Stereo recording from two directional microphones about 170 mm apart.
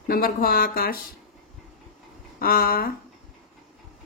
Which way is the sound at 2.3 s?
60° left (ahead or behind).